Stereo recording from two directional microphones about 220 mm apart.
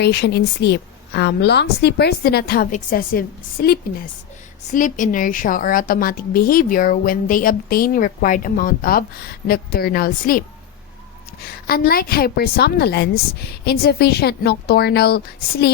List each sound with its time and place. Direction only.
0.0 s a woman's voice: 50° left (ahead or behind)
11.4 s a woman's voice: 45° left (ahead or behind)